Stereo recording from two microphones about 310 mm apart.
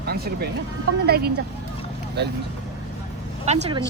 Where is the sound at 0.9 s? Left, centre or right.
Right.